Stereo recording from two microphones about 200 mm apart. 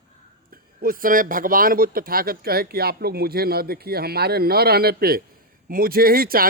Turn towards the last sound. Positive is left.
turn(degrees=-50)  # may be behind; listen again after turning